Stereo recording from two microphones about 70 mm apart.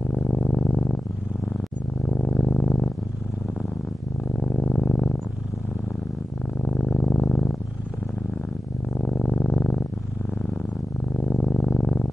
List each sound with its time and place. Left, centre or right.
0.3 s music: centre
2.2 s purr: centre
4.4 s purr: centre
6.6 s purr: centre
9.2 s purr: centre
11.1 s music: centre
11.6 s purr: centre